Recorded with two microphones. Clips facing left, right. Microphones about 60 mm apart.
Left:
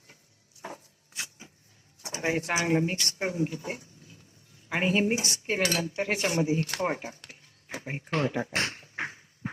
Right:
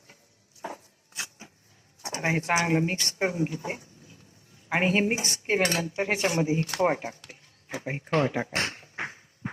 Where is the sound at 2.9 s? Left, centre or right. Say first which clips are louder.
Right 3 dB; right.